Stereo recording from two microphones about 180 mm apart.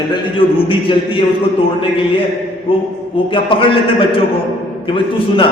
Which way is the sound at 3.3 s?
30° left (ahead or behind).